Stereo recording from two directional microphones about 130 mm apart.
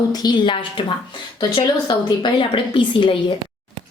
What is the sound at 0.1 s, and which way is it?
A woman's voice, 30° left (ahead or behind).